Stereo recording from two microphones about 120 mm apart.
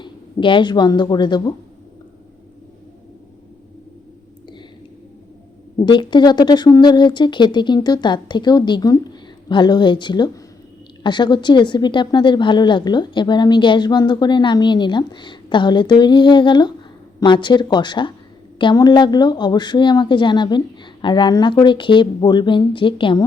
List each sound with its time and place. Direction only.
0.0 s speech: 45° left (ahead or behind)
5.8 s speech: 40° left (ahead or behind)